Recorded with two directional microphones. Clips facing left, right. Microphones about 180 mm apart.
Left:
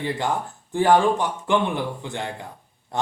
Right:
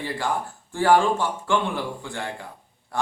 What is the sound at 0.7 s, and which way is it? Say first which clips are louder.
A man's voice: left 1 dB; 20° left (ahead or behind).